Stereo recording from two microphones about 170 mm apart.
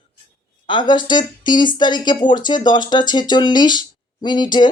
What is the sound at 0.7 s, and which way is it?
Speech, 25° left (ahead or behind).